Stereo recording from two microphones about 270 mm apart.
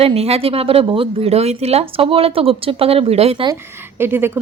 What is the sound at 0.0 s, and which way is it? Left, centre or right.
Speech, right.